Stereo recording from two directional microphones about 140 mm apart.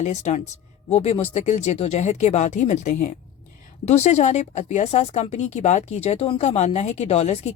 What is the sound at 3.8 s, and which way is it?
Speech, 55° left (ahead or behind).